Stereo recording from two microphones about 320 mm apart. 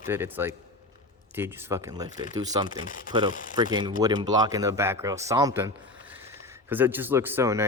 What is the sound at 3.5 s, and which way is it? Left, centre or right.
Speech, centre.